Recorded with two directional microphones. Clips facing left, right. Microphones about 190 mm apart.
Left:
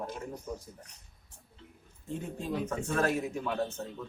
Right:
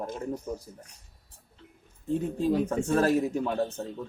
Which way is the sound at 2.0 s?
35° right (ahead or behind).